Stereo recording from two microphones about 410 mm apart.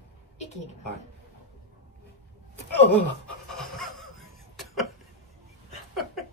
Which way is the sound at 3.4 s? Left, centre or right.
Centre.